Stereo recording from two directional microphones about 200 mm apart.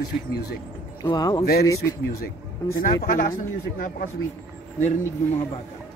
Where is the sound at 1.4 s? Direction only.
50° left (ahead or behind).